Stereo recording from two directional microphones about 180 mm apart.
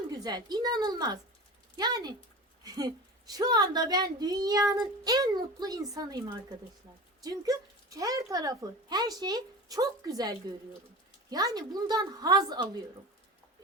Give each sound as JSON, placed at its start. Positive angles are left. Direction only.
{"t": 0.2, "sound": "a child's voice", "side_deg": -25}